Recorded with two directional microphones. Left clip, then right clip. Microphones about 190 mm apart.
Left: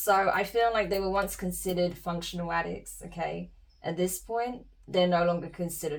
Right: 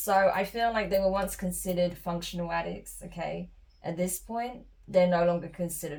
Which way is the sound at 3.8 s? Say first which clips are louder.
Left 2 dB; 40° left (ahead or behind).